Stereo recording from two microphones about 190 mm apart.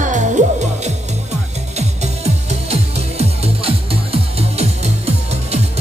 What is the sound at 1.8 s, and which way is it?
Music, 35° right (ahead or behind).